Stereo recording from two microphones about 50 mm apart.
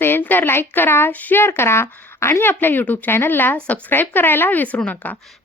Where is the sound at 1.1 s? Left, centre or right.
Left.